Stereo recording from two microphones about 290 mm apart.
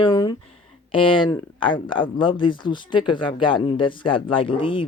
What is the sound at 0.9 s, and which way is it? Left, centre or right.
Speech, centre.